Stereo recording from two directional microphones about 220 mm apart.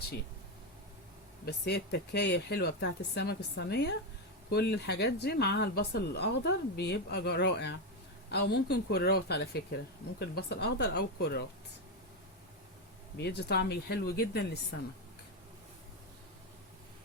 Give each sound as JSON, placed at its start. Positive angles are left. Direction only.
{"t": 1.5, "sound": "speech", "side_deg": 50}
{"t": 13.1, "sound": "speech", "side_deg": 50}